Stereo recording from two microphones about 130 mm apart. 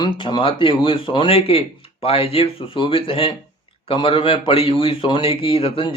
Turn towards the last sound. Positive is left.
turn(degrees=45)  # may be behind; listen again after turning